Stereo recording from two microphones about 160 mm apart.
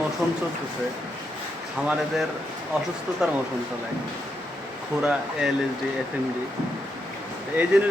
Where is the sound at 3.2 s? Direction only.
5° right (ahead or behind).